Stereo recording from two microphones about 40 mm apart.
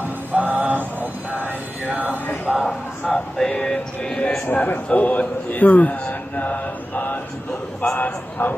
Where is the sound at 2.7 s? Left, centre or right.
Centre.